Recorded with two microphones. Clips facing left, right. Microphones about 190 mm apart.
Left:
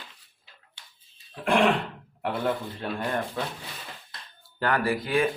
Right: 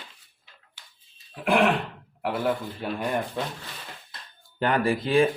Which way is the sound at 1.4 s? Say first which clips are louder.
Right 1 dB; 5° right (ahead or behind).